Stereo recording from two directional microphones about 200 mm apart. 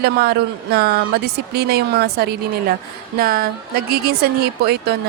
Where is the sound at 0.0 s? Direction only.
55° right (ahead or behind).